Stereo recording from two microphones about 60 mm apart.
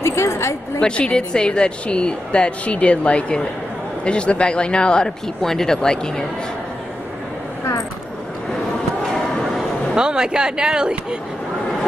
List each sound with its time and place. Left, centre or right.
0.0 s a sound: left
0.7 s a woman's voice: centre
9.9 s speech: centre